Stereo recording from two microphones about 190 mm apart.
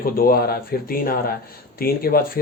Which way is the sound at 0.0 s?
50° left (ahead or behind).